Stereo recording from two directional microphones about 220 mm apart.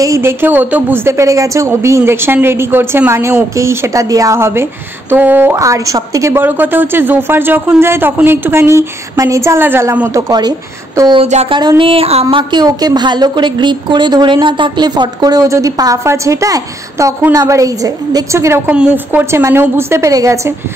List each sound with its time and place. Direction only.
0.0 s speech: 10° right (ahead or behind)